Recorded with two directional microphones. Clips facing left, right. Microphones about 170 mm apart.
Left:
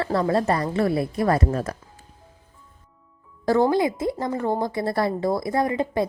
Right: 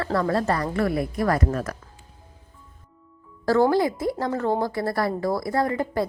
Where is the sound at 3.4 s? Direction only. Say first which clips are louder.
Even; 20° left (ahead or behind).